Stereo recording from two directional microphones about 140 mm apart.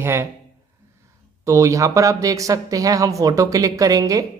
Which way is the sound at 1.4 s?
20° right (ahead or behind).